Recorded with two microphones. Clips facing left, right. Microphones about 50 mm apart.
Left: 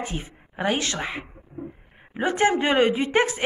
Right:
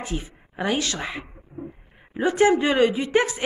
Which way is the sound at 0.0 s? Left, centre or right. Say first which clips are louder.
Right 1 dB; left.